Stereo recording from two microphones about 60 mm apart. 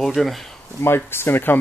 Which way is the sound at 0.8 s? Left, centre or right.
Left.